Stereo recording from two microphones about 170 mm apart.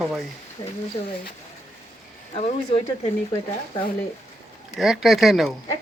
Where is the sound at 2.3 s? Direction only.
35° left (ahead or behind).